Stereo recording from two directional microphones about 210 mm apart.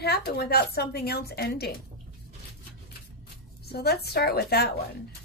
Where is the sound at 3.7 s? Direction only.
50° left (ahead or behind).